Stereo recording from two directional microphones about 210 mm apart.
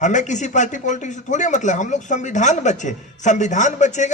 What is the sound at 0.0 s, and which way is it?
Speech, 35° left (ahead or behind).